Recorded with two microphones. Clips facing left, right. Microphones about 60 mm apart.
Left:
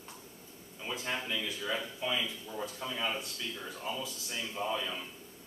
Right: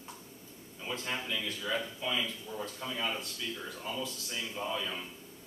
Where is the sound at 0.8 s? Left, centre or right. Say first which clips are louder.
Even; centre.